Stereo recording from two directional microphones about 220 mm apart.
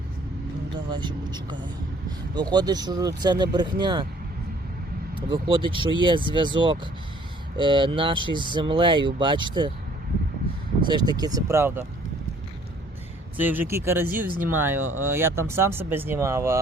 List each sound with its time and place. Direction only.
0.9 s speech: 20° right (ahead or behind)
5.3 s speech: 20° right (ahead or behind)
10.8 s speech: 20° right (ahead or behind)
13.3 s speech: 10° right (ahead or behind)